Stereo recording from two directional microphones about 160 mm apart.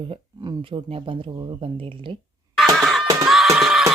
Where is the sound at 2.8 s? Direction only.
Centre (ahead or behind).